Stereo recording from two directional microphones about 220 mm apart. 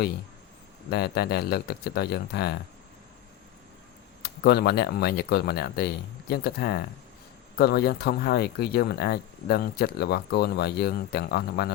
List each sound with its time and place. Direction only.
0.9 s speech: 45° left (ahead or behind)
4.2 s speech: 45° left (ahead or behind)